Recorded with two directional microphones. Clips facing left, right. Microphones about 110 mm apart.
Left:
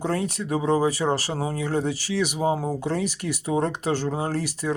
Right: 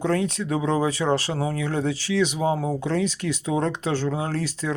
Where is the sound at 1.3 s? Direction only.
40° left (ahead or behind).